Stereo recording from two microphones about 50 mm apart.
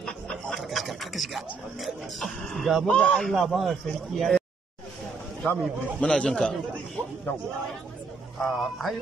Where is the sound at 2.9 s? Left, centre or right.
Left.